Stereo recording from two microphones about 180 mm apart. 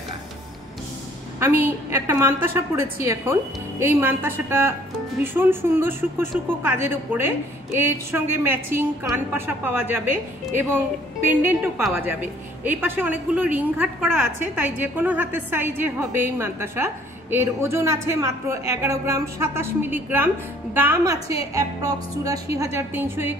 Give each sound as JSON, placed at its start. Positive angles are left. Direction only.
{"t": 1.4, "sound": "speech", "side_deg": -10}
{"t": 11.9, "sound": "speech", "side_deg": -10}
{"t": 21.5, "sound": "music", "side_deg": -20}
{"t": 22.6, "sound": "speech", "side_deg": -15}